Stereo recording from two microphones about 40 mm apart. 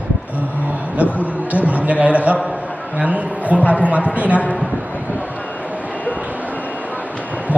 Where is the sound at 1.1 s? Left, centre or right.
Right.